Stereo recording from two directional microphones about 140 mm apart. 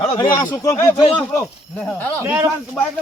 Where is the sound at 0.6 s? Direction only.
25° left (ahead or behind).